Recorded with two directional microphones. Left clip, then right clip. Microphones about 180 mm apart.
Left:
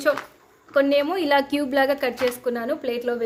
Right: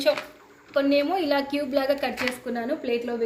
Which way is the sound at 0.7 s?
55° left (ahead or behind).